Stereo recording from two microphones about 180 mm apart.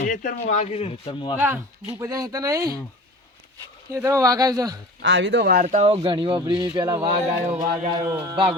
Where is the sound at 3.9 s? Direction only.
15° right (ahead or behind).